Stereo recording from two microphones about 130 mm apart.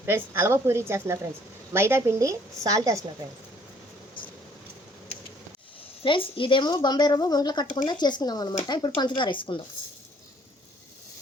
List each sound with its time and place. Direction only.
0.0 s a woman's voice: 20° right (ahead or behind)
6.0 s speech: 40° left (ahead or behind)